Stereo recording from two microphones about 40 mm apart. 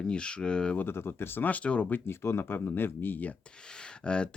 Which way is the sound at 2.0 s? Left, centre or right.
Left.